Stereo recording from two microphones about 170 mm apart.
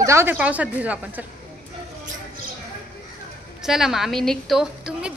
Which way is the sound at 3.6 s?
5° right (ahead or behind).